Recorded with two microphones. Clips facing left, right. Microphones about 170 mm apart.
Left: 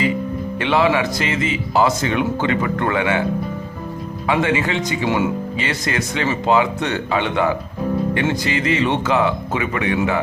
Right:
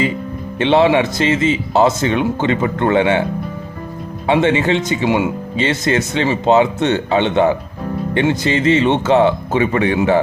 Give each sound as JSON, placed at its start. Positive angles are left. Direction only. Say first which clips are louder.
{"t": 0.6, "sound": "speech", "louder": "right 5 dB", "side_deg": -25}
{"t": 4.3, "sound": "speech", "louder": "right 5 dB", "side_deg": -25}